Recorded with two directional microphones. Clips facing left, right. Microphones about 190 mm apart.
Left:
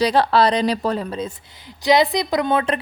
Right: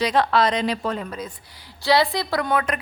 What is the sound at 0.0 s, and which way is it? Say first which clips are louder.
Speech: left 3 dB; 35° left (ahead or behind).